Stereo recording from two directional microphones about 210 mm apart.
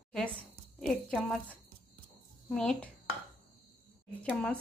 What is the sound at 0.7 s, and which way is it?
A woman's voice, centre (ahead or behind).